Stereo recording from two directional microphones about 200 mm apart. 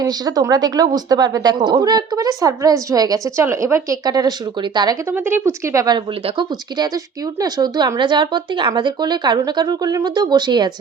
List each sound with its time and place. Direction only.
0.0 s a woman's voice: 20° right (ahead or behind)